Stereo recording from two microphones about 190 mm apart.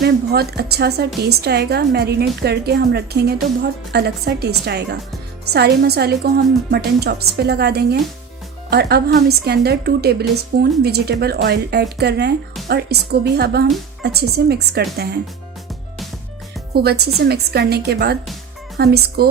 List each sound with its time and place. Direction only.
0.0 s a woman's voice: 60° right (ahead or behind)
16.7 s a woman's voice: 55° right (ahead or behind)